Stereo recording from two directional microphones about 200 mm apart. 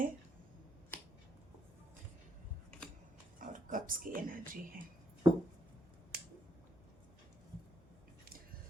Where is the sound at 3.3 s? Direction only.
45° right (ahead or behind).